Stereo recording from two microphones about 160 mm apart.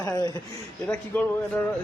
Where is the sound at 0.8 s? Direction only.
10° left (ahead or behind).